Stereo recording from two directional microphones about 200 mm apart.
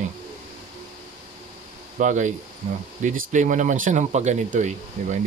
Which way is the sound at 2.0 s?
40° right (ahead or behind).